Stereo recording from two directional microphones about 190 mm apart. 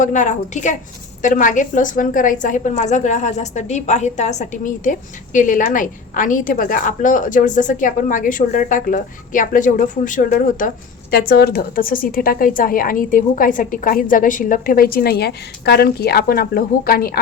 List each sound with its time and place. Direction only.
0.0 s a woman's voice: 40° left (ahead or behind)